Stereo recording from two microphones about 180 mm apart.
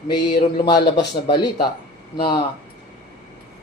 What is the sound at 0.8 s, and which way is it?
Speech, 70° left (ahead or behind).